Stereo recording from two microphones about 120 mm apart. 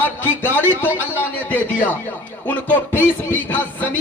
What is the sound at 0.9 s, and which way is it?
A man's voice, 15° left (ahead or behind).